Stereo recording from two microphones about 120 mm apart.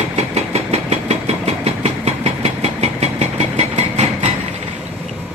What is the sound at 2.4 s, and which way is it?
Vehicle, 65° right (ahead or behind).